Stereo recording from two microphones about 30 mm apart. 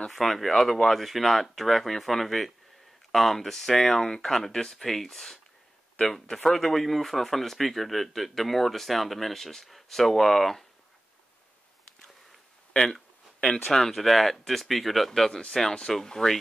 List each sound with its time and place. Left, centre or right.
0.1 s speech: centre; by 4.7 s left
4.7 s speech: centre
12.7 s speech: centre
13.9 s speech: centre
15.0 s speech: centre